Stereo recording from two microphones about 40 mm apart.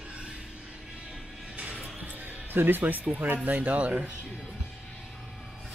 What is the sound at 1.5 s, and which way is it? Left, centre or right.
Music, right.